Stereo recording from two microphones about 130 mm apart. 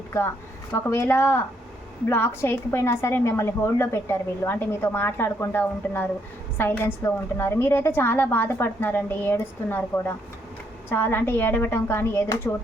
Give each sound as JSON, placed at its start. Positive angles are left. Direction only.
{"t": 0.7, "sound": "a woman's voice", "side_deg": 20}